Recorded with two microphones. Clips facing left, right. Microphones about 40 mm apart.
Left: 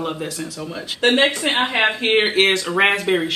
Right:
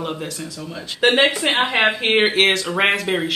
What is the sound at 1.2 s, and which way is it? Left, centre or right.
Speech, centre.